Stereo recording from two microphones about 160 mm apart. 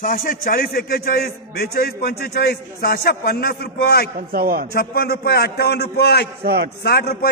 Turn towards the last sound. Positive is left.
turn(degrees=85)